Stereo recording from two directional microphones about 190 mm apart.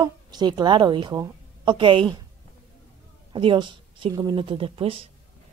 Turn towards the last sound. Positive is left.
turn(degrees=-30)  # may be behind; listen again after turning